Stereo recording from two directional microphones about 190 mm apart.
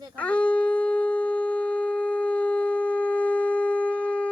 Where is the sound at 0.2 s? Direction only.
5° left (ahead or behind).